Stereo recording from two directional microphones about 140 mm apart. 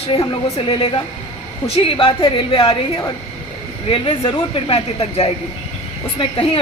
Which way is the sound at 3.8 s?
40° left (ahead or behind).